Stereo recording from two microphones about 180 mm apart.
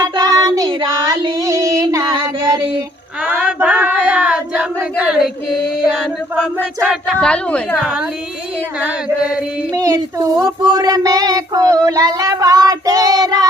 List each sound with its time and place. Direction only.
0.0 s child singing: 20° right (ahead or behind)
3.2 s a sound: 5° right (ahead or behind)
5.8 s speech: centre (ahead or behind)
8.8 s chant: 5° right (ahead or behind)
9.7 s child singing: 20° right (ahead or behind)